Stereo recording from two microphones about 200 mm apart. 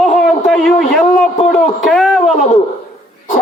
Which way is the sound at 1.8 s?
Centre (ahead or behind).